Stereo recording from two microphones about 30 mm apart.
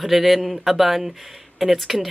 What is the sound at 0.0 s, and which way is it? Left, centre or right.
Speech, centre.